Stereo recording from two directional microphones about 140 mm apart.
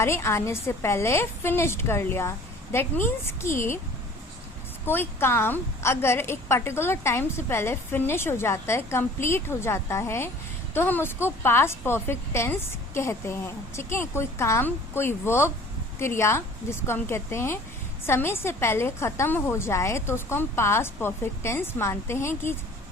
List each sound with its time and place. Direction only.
0.0 s a woman's voice: 20° left (ahead or behind)
4.9 s a woman's voice: 15° left (ahead or behind)